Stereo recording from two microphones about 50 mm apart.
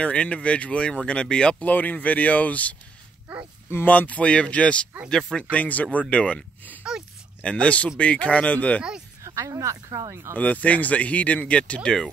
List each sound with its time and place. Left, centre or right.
0.0 s speech: left
1.7 s speech: left
3.3 s a sound: right
3.7 s speech: left
6.8 s a sound: centre
7.4 s speech: left
9.2 s speech: right
10.3 s speech: left